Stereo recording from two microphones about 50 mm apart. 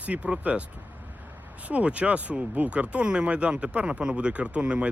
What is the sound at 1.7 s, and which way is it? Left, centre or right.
Speech, right.